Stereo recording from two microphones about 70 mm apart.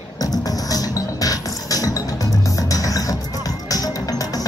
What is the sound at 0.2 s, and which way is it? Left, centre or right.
Music, left.